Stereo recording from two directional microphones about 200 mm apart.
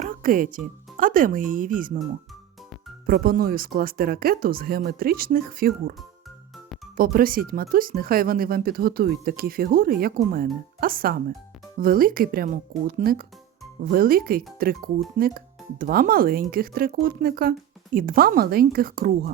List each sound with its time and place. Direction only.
0.0 s speech: 45° right (ahead or behind)
3.1 s speech: 45° right (ahead or behind)
6.9 s speech: 45° right (ahead or behind)